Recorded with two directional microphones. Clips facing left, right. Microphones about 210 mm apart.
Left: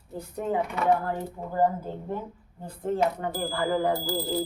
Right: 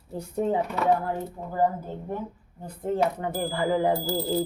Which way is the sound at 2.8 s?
20° right (ahead or behind).